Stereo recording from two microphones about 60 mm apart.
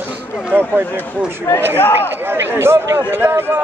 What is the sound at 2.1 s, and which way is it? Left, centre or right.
A man's voice, right.